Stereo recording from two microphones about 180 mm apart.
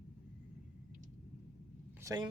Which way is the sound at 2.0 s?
20° right (ahead or behind).